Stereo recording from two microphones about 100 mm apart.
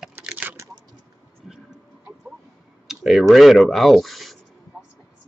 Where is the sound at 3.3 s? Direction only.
Centre (ahead or behind).